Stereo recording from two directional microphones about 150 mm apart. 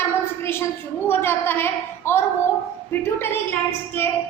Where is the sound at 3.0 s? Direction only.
15° left (ahead or behind).